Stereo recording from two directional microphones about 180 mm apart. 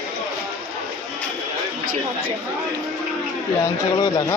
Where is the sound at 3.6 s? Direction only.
20° left (ahead or behind).